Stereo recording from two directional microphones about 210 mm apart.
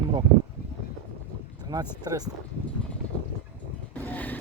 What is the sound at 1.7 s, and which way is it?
Speech, 15° right (ahead or behind).